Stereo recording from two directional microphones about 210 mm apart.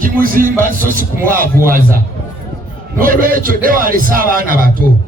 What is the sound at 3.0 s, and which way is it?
A man's voice, 40° right (ahead or behind).